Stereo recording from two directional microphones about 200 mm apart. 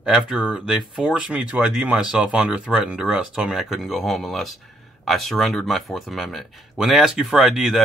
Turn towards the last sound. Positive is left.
turn(degrees=0)  # may be behind; listen again after turning